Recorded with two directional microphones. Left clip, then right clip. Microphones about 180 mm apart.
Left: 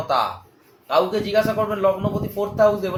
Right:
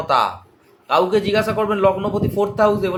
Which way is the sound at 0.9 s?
50° right (ahead or behind).